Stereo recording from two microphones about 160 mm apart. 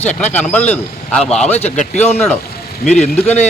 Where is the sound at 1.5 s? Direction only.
45° left (ahead or behind).